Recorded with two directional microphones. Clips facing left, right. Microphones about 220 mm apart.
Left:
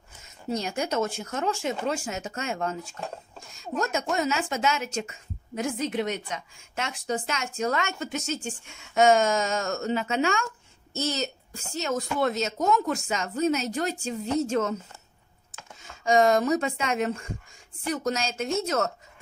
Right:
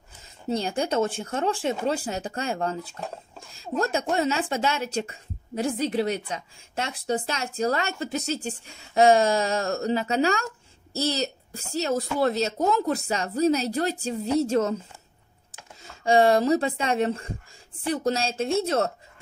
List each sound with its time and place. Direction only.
0.5 s a woman's voice: 30° right (ahead or behind)
15.8 s a woman's voice: 35° right (ahead or behind)